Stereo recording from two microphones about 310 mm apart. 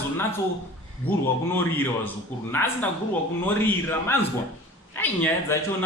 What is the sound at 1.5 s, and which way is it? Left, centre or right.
Speech, centre.